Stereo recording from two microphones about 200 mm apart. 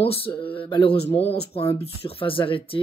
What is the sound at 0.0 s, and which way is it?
Speech, 30° left (ahead or behind).